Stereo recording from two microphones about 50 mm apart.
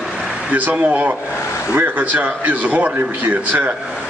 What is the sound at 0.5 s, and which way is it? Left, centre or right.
Speech, right.